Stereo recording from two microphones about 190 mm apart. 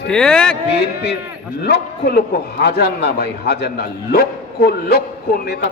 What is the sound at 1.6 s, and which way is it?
A man's voice, 60° left (ahead or behind).